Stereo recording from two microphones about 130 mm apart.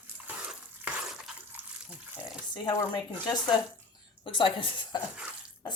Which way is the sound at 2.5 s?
35° left (ahead or behind).